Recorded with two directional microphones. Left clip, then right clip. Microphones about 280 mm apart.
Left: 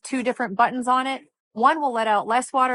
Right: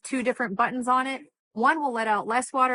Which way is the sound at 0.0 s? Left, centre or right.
Left.